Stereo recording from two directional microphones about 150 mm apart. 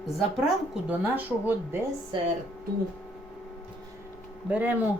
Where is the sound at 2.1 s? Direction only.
30° right (ahead or behind).